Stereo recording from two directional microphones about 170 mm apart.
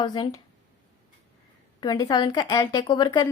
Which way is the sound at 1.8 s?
25° left (ahead or behind).